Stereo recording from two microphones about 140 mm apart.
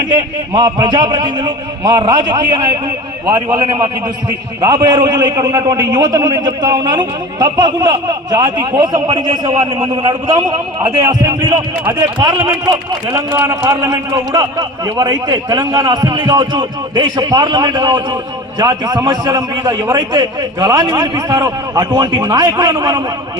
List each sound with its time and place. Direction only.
0.5 s a man's voice: 30° right (ahead or behind)
3.3 s a man's voice: 30° right (ahead or behind)